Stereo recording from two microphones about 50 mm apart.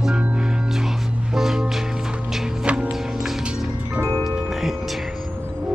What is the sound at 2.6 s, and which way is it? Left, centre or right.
Music, right.